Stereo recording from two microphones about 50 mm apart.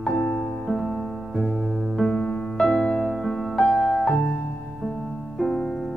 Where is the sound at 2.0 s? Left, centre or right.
Centre.